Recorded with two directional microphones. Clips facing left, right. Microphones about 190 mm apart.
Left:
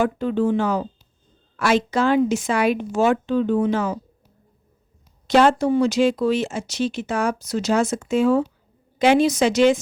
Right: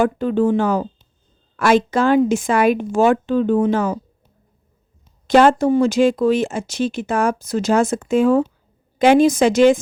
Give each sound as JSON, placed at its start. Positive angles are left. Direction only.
{"t": 0.0, "sound": "speech", "side_deg": -50}
{"t": 5.3, "sound": "speech", "side_deg": -50}